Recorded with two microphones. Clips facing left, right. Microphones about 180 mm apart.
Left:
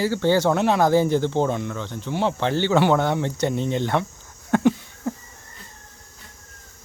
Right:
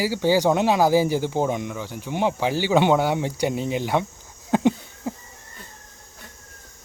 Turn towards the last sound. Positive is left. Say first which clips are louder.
# left 1 dB
turn(degrees=-20)  # may be behind; listen again after turning